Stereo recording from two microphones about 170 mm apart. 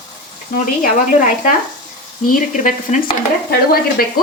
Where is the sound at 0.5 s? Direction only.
50° left (ahead or behind).